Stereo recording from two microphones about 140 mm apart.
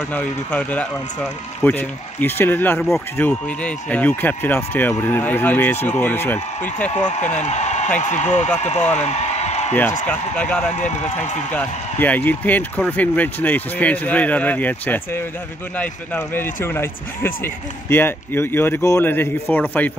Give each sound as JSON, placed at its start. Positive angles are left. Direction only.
{"t": 0.1, "sound": "speech", "side_deg": 10}
{"t": 7.3, "sound": "a man's voice", "side_deg": 55}
{"t": 8.9, "sound": "a sound", "side_deg": 50}
{"t": 10.0, "sound": "speech", "side_deg": 10}